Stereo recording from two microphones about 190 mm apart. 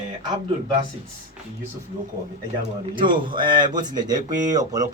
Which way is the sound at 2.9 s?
25° right (ahead or behind).